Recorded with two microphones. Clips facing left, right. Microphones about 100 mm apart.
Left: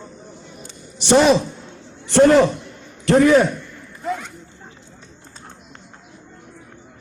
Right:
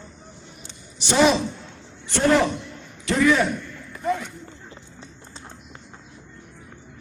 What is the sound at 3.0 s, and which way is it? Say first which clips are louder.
Speech: left 6 dB; 45° left (ahead or behind).